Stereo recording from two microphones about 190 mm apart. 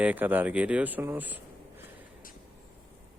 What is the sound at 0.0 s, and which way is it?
Speech, 10° right (ahead or behind).